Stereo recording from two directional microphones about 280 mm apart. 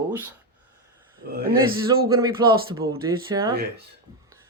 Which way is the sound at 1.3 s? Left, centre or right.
Right.